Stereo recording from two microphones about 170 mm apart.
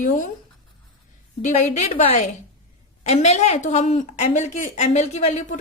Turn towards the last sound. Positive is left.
turn(degrees=40)  # may be behind; listen again after turning